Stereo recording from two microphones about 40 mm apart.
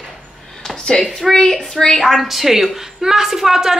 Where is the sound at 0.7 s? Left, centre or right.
Centre.